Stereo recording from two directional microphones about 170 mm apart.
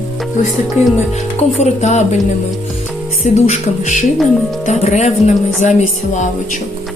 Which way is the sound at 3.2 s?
40° left (ahead or behind).